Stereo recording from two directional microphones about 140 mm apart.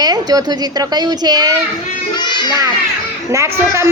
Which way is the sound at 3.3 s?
20° right (ahead or behind).